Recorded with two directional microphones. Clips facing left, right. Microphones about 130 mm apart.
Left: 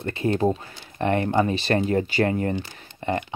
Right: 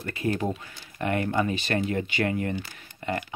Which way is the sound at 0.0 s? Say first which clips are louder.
Left 5 dB; 25° left (ahead or behind).